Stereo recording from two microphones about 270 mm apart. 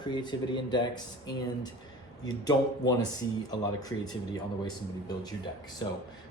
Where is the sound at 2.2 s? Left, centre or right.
Centre.